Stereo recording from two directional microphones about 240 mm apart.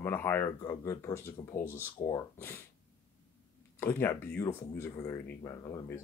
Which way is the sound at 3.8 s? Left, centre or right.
Centre.